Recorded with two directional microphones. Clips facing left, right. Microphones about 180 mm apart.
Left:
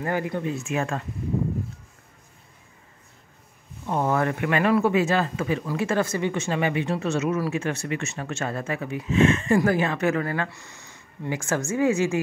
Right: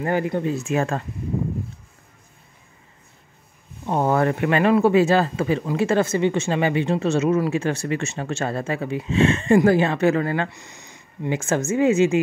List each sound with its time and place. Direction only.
0.0 s speech: 25° right (ahead or behind)
3.8 s speech: 30° right (ahead or behind)